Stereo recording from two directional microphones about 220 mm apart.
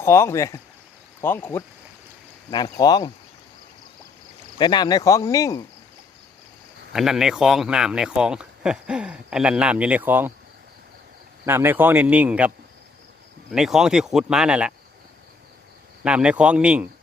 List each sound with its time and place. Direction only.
0.0 s speech: 10° left (ahead or behind)
4.5 s speech: 20° left (ahead or behind)
6.9 s speech: centre (ahead or behind)
11.4 s speech: 10° right (ahead or behind)
13.5 s speech: centre (ahead or behind)
16.0 s speech: 5° right (ahead or behind)